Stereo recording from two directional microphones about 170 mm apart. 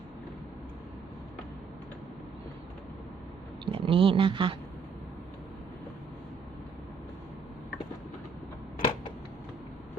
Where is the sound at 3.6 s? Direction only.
30° right (ahead or behind).